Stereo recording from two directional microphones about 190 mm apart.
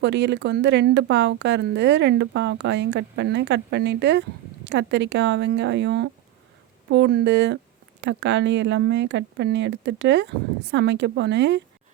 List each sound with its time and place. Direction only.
0.0 s speech: 70° right (ahead or behind)